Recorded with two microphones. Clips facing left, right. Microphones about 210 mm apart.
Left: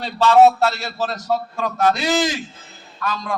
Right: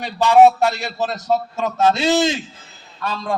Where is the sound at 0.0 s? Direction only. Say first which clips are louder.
Right 1 dB; 15° right (ahead or behind).